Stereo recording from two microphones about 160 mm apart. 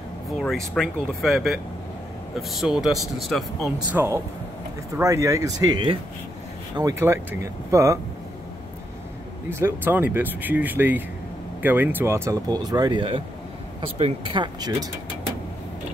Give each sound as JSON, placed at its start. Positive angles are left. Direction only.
{"t": 0.4, "sound": "speech", "side_deg": 5}
{"t": 3.9, "sound": "speech", "side_deg": -15}
{"t": 9.5, "sound": "speech", "side_deg": -15}